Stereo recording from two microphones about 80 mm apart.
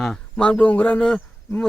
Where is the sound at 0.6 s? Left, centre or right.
Centre.